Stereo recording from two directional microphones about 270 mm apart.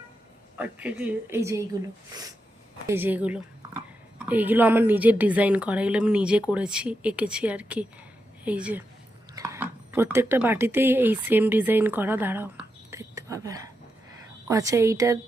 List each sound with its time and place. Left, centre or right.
0.5 s speech: centre
2.8 s a woman's voice: centre